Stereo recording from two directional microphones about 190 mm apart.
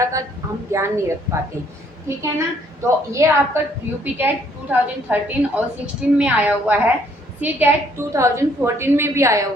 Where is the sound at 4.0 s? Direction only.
10° right (ahead or behind).